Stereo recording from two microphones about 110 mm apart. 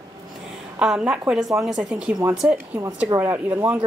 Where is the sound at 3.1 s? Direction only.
20° right (ahead or behind).